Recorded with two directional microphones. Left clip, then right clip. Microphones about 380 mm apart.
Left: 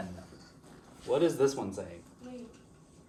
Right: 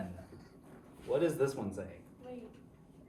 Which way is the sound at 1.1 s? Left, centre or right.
Centre.